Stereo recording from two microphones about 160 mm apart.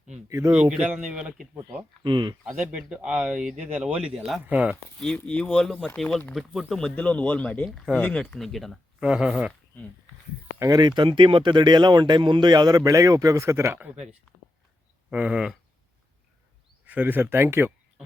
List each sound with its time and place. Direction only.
0.3 s speech: 20° right (ahead or behind)
0.5 s speech: 5° right (ahead or behind)
2.0 s speech: 30° right (ahead or behind)
2.4 s speech: 5° right (ahead or behind)
10.6 s speech: 25° right (ahead or behind)
15.1 s speech: 5° right (ahead or behind)
16.8 s speech: 10° right (ahead or behind)